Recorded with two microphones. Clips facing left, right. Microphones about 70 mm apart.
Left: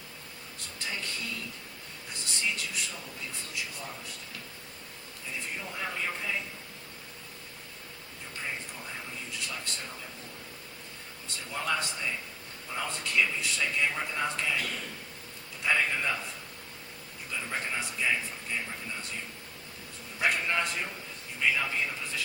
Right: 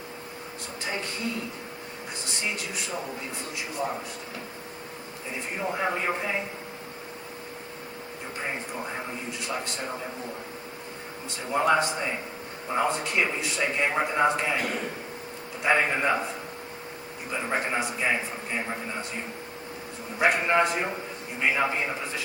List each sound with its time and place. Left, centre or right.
0.8 s music: right
2.1 s a man's voice: right
5.3 s a man's voice: right
8.4 s a man's voice: right
11.3 s a man's voice: right
17.3 s a man's voice: right